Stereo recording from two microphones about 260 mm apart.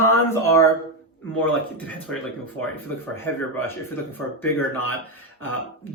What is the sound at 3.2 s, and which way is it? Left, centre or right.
Speech, centre.